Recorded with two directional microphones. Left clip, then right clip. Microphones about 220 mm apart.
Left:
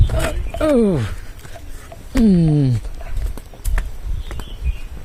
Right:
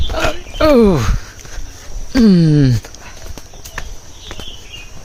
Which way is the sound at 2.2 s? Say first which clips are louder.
Right 4 dB; 25° right (ahead or behind).